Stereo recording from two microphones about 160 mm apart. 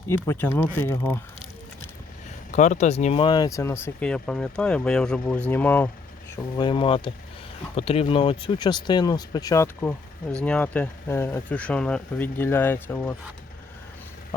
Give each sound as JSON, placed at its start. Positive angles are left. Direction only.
{"t": 0.1, "sound": "speech", "side_deg": 15}
{"t": 2.5, "sound": "speech", "side_deg": 50}
{"t": 3.2, "sound": "speech", "side_deg": 25}
{"t": 4.0, "sound": "speech", "side_deg": 5}
{"t": 6.6, "sound": "speech", "side_deg": 30}
{"t": 10.4, "sound": "speech", "side_deg": 10}